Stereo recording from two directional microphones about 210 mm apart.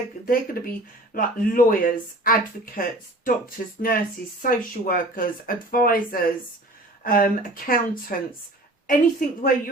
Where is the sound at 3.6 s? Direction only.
40° left (ahead or behind).